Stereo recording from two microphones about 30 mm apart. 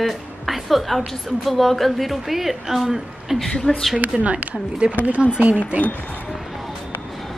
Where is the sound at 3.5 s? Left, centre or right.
Left.